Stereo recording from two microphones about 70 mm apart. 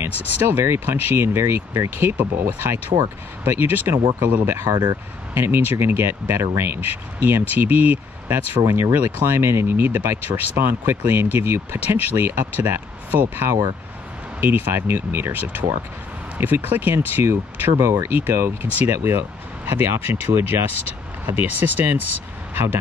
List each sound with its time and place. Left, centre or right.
0.4 s speech: right
4.2 s speech: right
4.5 s speech: right